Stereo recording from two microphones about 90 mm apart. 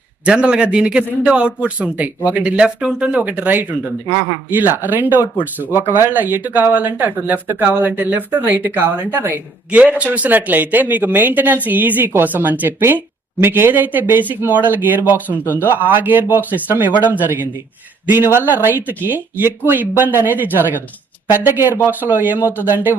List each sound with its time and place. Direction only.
0.3 s a man's voice: 10° right (ahead or behind)